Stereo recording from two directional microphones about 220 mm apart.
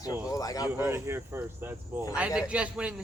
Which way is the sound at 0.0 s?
15° left (ahead or behind).